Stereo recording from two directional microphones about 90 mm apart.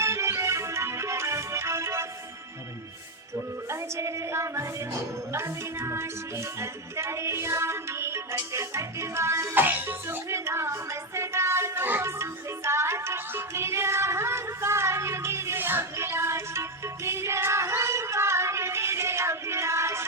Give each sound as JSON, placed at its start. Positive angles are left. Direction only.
{"t": 0.0, "sound": "music", "side_deg": -30}
{"t": 3.7, "sound": "music", "side_deg": -30}